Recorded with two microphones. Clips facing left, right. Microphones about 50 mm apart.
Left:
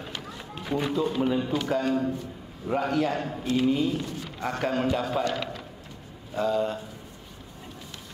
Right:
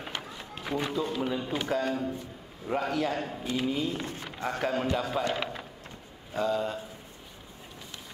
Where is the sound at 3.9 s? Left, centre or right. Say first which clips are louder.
Left 4 dB; right.